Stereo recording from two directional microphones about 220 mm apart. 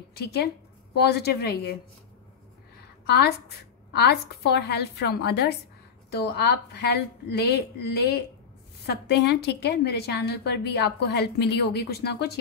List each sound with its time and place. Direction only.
0.1 s a woman's voice: 45° left (ahead or behind)
3.1 s a woman's voice: 50° left (ahead or behind)